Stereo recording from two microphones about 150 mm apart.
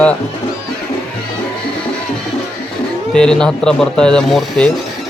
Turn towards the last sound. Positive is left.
turn(degrees=5)  # may be behind; listen again after turning